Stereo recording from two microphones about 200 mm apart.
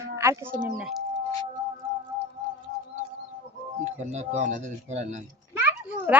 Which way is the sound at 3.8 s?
35° right (ahead or behind).